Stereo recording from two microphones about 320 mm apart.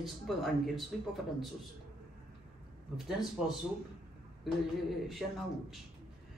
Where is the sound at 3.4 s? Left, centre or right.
Centre.